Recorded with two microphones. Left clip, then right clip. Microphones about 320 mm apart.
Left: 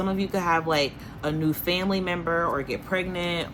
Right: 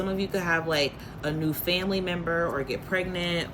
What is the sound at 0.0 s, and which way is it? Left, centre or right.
A woman's voice, centre.